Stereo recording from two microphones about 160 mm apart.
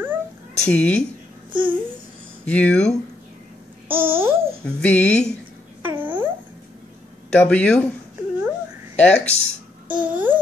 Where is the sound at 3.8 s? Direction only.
15° right (ahead or behind).